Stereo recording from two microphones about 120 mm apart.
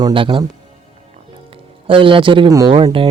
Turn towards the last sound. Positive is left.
turn(degrees=-45)  # may be behind; listen again after turning